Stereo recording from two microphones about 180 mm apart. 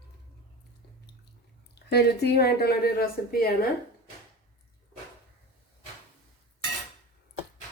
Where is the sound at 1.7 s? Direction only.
65° left (ahead or behind).